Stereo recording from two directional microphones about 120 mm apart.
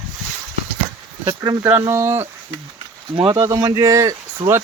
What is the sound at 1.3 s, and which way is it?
Speech, 30° right (ahead or behind).